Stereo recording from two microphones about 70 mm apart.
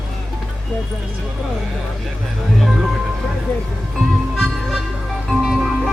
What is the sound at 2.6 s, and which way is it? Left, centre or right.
Speech, centre.